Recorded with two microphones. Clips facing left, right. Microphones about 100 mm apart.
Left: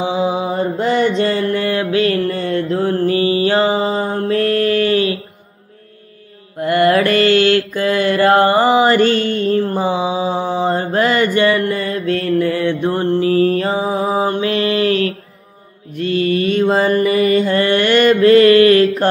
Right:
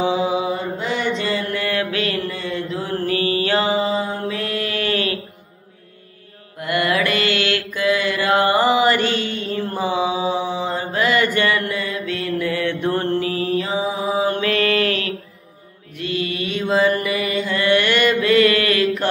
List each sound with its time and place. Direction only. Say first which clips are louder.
0.0 s mantra: left 2 dB; 25° left (ahead or behind)
0.5 s mantra: left 6 dB; 50° left (ahead or behind); by 2.1 s 30° left (ahead or behind)
2.2 s mantra: left 7 dB; 50° left (ahead or behind)
3.1 s mantra: left 2 dB; 25° left (ahead or behind)
6.6 s mantra: left 7 dB; 40° left (ahead or behind)
9.7 s mantra: left 3 dB; 30° left (ahead or behind)
10.4 s mantra: left 6 dB; 50° left (ahead or behind)
13.5 s mantra: left 4 dB; 50° left (ahead or behind)
14.3 s mantra: left 2 dB; 25° left (ahead or behind)